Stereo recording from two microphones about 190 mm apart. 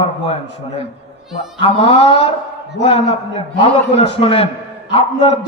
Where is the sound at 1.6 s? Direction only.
30° left (ahead or behind).